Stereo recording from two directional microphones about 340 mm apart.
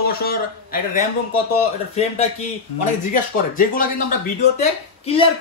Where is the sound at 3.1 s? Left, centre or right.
Left.